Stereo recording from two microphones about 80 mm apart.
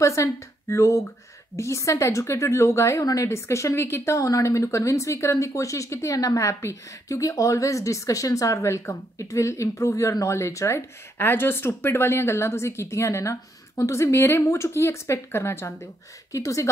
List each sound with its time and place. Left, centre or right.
0.0 s a woman's voice: left
11.1 s a woman's voice: left